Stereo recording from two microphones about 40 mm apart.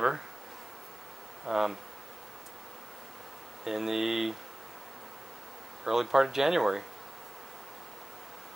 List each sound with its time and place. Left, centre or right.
1.4 s insect: centre
3.6 s a sound: centre
5.9 s speech: centre